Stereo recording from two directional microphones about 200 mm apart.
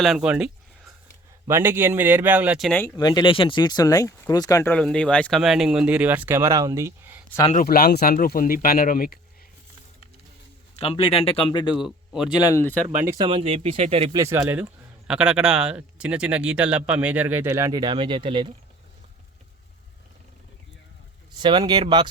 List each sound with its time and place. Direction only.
0.0 s speech: 5° right (ahead or behind)
2.8 s speech: 20° left (ahead or behind); by 7.3 s 10° right (ahead or behind)
7.3 s speech: 15° left (ahead or behind)
7.5 s speech: 45° left (ahead or behind)
10.8 s speech: 30° left (ahead or behind)
11.7 s speech: 5° right (ahead or behind)
12.5 s speech: 10° left (ahead or behind)
12.9 s speech: 10° right (ahead or behind)
13.1 s speech: 25° right (ahead or behind)
14.2 s speech: 15° right (ahead or behind)
14.6 s speech: 5° right (ahead or behind); by 18.5 s 25° right (ahead or behind)
21.3 s speech: 20° right (ahead or behind)